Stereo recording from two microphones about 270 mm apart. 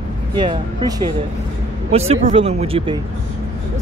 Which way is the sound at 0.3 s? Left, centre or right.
Centre.